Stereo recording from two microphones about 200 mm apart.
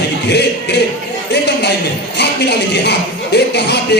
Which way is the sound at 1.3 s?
55° left (ahead or behind).